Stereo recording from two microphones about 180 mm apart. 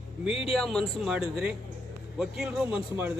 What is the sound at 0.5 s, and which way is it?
Speech, 5° left (ahead or behind).